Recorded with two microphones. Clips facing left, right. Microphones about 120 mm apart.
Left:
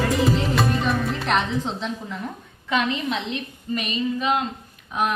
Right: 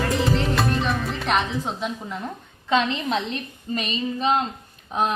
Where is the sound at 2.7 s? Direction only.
30° right (ahead or behind).